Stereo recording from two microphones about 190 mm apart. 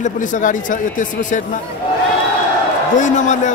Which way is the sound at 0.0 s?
45° left (ahead or behind).